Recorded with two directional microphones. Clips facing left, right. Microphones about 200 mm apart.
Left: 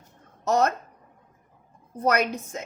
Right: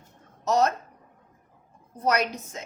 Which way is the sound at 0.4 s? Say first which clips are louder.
Even; 55° left (ahead or behind).